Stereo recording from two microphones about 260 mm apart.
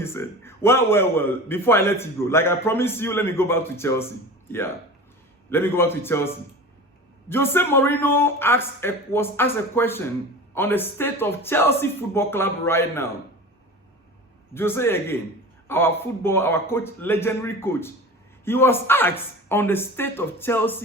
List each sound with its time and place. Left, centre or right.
0.0 s a man's voice: centre
5.5 s a man's voice: centre
14.5 s a man's voice: centre